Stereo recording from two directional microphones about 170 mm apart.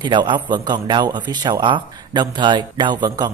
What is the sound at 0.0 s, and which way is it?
A man's voice, 25° right (ahead or behind).